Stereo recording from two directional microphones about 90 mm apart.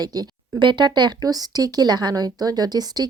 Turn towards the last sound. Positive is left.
turn(degrees=-45)  # may be behind; listen again after turning